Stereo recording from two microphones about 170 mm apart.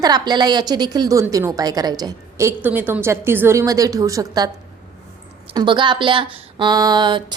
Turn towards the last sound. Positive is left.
turn(degrees=-30)  # may be behind; listen again after turning